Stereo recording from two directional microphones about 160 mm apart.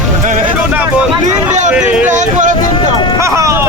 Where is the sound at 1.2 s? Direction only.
50° right (ahead or behind).